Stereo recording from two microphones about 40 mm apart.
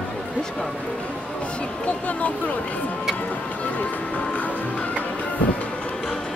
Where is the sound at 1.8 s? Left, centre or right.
Left.